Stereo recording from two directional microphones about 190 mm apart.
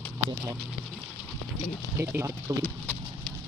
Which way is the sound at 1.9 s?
15° right (ahead or behind).